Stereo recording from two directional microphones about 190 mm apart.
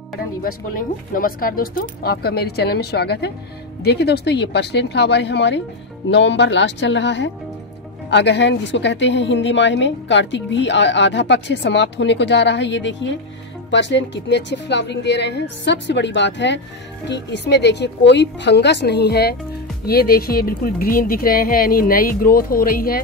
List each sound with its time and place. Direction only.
0.4 s a woman's voice: 50° left (ahead or behind)